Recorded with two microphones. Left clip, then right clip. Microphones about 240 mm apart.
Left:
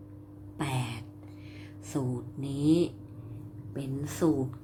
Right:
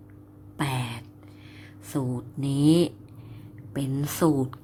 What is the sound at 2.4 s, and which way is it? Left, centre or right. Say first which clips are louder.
Speech: right 5 dB; right.